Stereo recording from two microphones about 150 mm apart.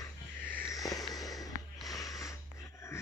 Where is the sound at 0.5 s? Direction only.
15° left (ahead or behind).